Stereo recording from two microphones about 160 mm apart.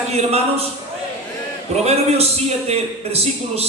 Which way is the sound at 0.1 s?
40° right (ahead or behind).